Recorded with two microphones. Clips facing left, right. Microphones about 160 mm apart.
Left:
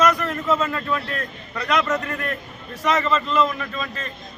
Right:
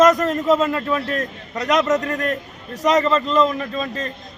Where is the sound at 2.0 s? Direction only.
40° right (ahead or behind).